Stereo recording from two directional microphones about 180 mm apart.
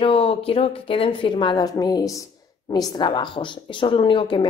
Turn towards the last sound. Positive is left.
turn(degrees=30)  # may be behind; listen again after turning